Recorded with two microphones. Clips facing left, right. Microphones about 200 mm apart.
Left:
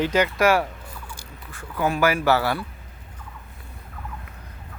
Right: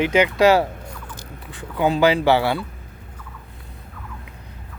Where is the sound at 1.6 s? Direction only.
20° right (ahead or behind).